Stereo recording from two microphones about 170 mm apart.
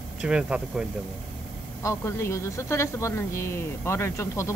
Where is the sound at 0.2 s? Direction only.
5° right (ahead or behind).